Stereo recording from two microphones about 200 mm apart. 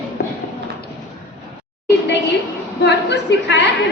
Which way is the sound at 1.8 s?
60° left (ahead or behind).